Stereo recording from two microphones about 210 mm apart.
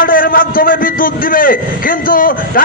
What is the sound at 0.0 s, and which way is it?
A man's voice, 45° left (ahead or behind).